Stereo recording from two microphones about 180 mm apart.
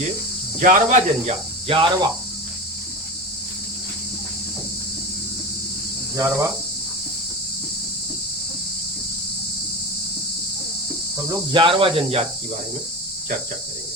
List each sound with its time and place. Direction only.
0.6 s speech: 40° right (ahead or behind)
6.1 s speech: 15° right (ahead or behind)
11.3 s speech: 25° right (ahead or behind)